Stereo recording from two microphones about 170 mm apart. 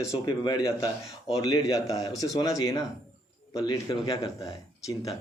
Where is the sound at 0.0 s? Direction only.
20° left (ahead or behind).